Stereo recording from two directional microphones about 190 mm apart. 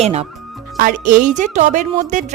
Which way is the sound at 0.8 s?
45° right (ahead or behind).